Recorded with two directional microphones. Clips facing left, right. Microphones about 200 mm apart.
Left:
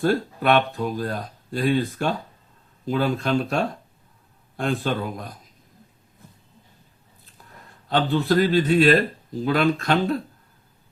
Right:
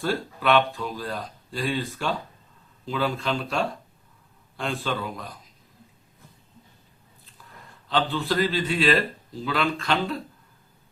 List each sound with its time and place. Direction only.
0.0 s speech: 45° left (ahead or behind)
7.9 s speech: 45° left (ahead or behind)